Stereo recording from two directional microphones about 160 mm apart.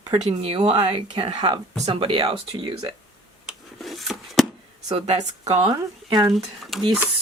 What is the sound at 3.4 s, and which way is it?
Wood, centre (ahead or behind).